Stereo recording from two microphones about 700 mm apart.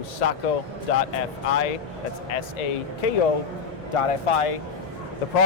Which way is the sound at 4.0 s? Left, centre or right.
Left.